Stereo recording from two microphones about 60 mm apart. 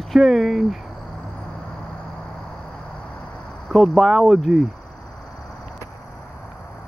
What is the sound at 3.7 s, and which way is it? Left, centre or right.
Speech, centre.